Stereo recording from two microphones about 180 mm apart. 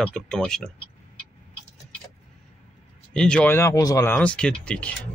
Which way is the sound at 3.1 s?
5° left (ahead or behind).